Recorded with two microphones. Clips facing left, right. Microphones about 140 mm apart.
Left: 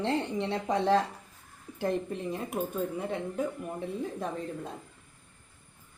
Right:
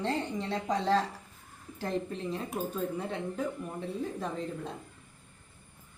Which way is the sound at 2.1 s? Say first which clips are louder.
Left 2 dB; 10° left (ahead or behind).